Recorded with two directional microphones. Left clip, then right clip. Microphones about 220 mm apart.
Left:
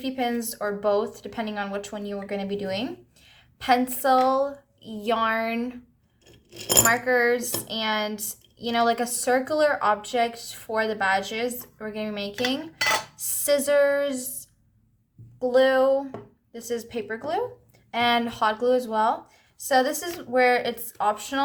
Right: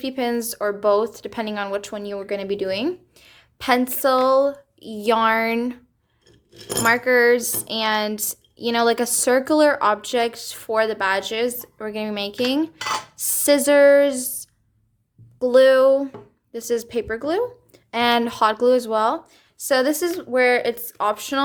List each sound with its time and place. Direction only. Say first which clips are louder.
0.0 s a woman's voice: right 4 dB; 50° right (ahead or behind)
6.8 s a woman's voice: right 7 dB; 45° right (ahead or behind)